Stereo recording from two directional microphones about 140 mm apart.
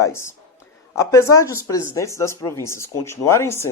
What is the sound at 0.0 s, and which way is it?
Speech, 20° left (ahead or behind).